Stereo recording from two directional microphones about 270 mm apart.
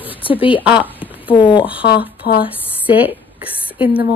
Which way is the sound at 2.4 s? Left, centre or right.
Centre.